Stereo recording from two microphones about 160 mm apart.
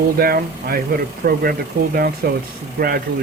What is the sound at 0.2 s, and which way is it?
Speech, 65° right (ahead or behind).